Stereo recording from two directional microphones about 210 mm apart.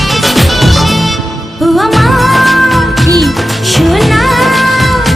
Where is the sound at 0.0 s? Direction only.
Centre (ahead or behind).